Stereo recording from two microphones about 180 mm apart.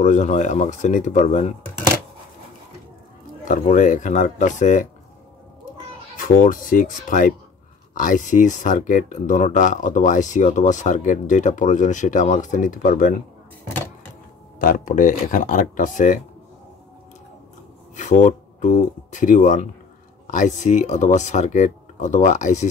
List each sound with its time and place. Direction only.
0.0 s speech: 40° left (ahead or behind)
3.4 s speech: 45° left (ahead or behind)
6.1 s speech: 50° left (ahead or behind)
14.6 s speech: 50° left (ahead or behind)
17.9 s speech: 40° left (ahead or behind)